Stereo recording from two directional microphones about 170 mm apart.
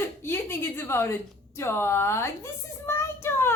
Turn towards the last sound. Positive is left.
turn(degrees=15)  # may be behind; listen again after turning